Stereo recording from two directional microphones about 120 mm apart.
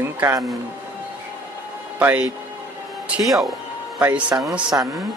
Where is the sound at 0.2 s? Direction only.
25° right (ahead or behind).